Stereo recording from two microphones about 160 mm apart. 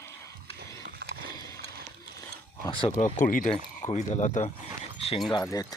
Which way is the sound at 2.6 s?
30° left (ahead or behind).